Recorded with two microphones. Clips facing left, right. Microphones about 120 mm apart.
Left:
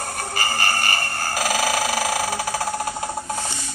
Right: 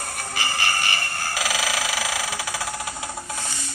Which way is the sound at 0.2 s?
45° left (ahead or behind).